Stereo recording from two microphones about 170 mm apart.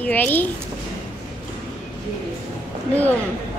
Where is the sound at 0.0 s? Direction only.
10° left (ahead or behind).